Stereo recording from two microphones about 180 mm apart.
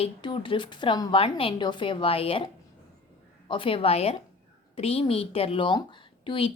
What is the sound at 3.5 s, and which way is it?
A woman's voice, 30° left (ahead or behind).